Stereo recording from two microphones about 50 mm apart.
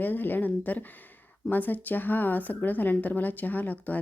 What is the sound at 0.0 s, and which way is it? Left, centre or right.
A woman's voice, left.